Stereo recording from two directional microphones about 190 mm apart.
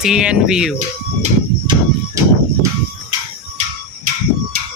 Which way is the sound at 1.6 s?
25° right (ahead or behind).